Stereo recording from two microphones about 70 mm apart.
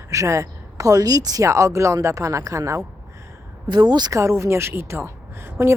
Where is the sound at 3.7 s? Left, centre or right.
Right.